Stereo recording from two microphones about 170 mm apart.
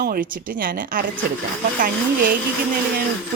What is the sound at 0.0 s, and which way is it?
Speech, 55° right (ahead or behind).